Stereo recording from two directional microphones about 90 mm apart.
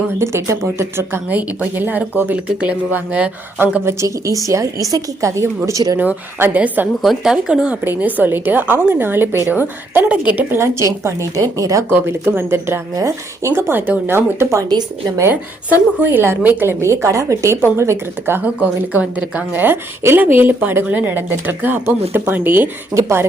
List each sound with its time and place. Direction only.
0.2 s a woman's voice: 30° right (ahead or behind)
4.0 s a woman's voice: 35° right (ahead or behind)
6.0 s a woman's voice: 20° right (ahead or behind)
7.0 s a woman's voice: 5° right (ahead or behind)
10.5 s a woman's voice: 30° right (ahead or behind)
11.9 s a woman's voice: 25° right (ahead or behind)
16.0 s a woman's voice: 25° right (ahead or behind)
23.0 s a woman's voice: 35° right (ahead or behind)